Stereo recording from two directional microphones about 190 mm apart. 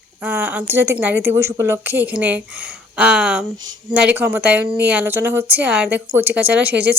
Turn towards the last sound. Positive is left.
turn(degrees=-10)  # may be behind; listen again after turning